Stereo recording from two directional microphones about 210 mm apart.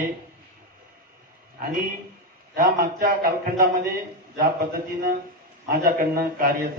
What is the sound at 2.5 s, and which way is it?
Speech, 45° right (ahead or behind).